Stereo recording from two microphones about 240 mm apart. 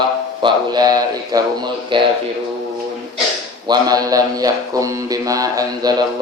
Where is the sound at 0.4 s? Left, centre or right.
Centre.